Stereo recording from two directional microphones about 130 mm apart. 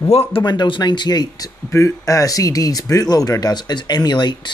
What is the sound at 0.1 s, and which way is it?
Speech, 50° left (ahead or behind).